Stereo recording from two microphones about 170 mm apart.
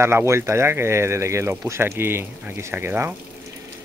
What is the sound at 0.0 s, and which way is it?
Speech, 15° right (ahead or behind).